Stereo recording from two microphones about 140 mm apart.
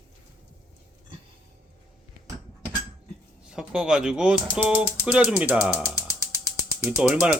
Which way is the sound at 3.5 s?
5° right (ahead or behind).